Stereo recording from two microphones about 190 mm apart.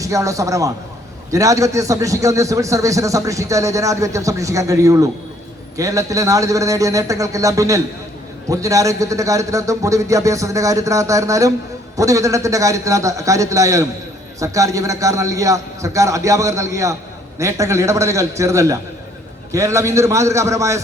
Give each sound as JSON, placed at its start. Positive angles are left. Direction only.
{"t": 0.0, "sound": "a man's voice", "side_deg": -15}